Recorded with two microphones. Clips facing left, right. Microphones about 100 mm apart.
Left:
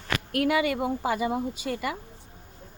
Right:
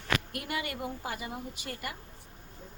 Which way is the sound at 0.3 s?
80° left.